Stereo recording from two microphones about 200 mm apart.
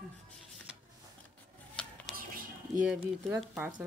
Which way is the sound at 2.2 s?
45° right (ahead or behind).